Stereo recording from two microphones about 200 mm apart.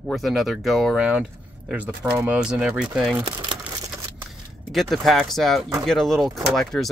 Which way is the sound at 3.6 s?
15° right (ahead or behind).